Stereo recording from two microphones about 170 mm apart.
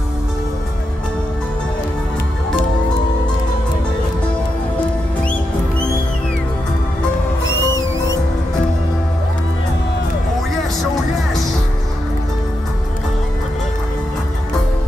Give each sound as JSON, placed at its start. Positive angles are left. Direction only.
{"t": 7.4, "sound": "music", "side_deg": 15}